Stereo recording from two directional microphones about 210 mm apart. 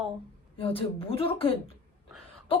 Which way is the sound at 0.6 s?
25° left (ahead or behind).